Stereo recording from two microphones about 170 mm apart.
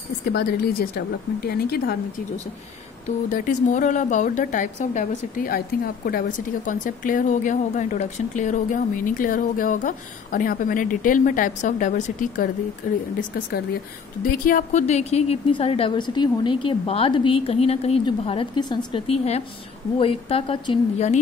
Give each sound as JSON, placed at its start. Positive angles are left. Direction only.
{"t": 0.2, "sound": "a woman's voice", "side_deg": 70}
{"t": 3.3, "sound": "speech", "side_deg": 50}
{"t": 14.2, "sound": "a woman's voice", "side_deg": 55}